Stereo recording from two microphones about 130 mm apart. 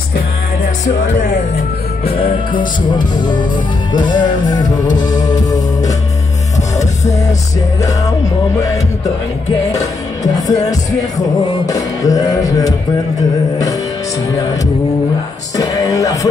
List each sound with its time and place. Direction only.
2.0 s music: 45° left (ahead or behind)
3.9 s music: 35° left (ahead or behind)
9.7 s music: 25° left (ahead or behind)
15.5 s music: 25° left (ahead or behind)